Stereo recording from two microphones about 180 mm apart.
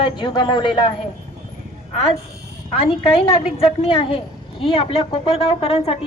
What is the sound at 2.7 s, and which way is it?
A woman's voice, 30° left (ahead or behind).